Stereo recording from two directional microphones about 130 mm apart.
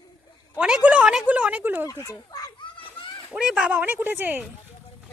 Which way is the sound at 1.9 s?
25° left (ahead or behind).